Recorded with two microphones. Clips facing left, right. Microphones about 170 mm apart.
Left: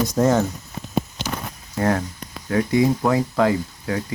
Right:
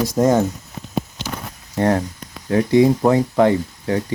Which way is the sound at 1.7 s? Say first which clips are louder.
Right 3 dB; 30° right (ahead or behind).